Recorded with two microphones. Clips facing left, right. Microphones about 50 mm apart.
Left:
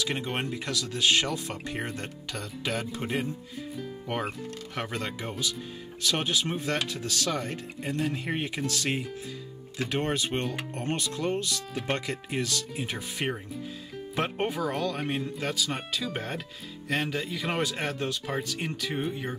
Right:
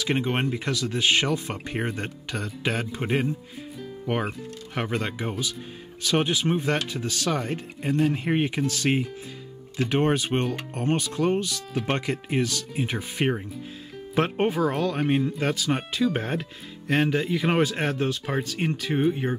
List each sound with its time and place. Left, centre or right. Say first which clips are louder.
0.0 s speech: right 5 dB; right
4.0 s speech: right 5 dB; centre
11.7 s speech: right 5 dB; centre
12.1 s speech: right 5 dB; right